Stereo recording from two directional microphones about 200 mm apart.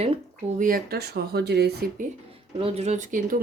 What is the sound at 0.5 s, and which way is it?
Speech, 45° right (ahead or behind).